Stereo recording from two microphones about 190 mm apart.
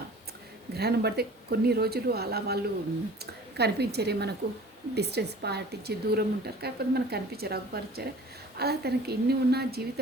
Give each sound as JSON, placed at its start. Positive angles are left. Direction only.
{"t": 0.7, "sound": "a woman's voice", "side_deg": -55}
{"t": 3.6, "sound": "a woman's voice", "side_deg": -60}